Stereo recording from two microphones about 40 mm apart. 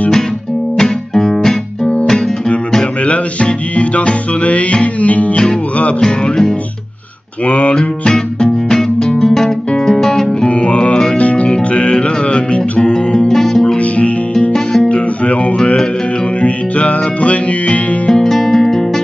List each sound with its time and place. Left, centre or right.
0.7 s music: centre
3.1 s music: left
5.9 s music: centre
7.4 s music: left
7.7 s music: centre
9.2 s guitar: centre
9.8 s music: centre
10.4 s music: left
13.3 s music: centre
13.7 s music: left
14.9 s guitar: left
15.5 s music: left
16.3 s music: left
18.3 s music: centre